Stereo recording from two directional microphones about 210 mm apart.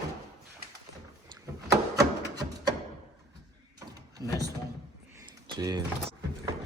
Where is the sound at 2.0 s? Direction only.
15° right (ahead or behind).